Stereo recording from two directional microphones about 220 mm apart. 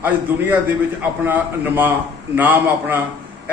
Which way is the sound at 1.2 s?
10° right (ahead or behind).